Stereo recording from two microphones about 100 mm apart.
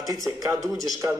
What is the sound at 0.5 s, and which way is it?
Speech, centre (ahead or behind).